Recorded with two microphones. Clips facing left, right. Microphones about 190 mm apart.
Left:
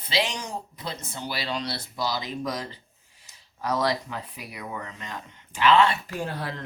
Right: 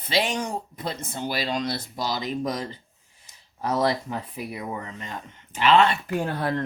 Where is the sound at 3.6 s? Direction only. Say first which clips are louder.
Right 2 dB; 25° right (ahead or behind).